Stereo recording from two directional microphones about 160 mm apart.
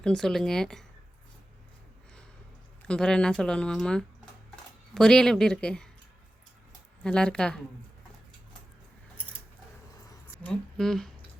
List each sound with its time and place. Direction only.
0.0 s speech: 5° left (ahead or behind)
2.8 s speech: 5° left (ahead or behind)
7.0 s speech: 5° left (ahead or behind)
10.1 s a sound: 20° left (ahead or behind)
10.5 s speech: 5° left (ahead or behind)